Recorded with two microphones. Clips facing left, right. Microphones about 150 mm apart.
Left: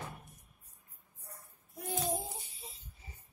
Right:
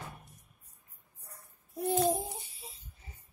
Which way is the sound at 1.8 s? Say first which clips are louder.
Right 8 dB; 35° right (ahead or behind).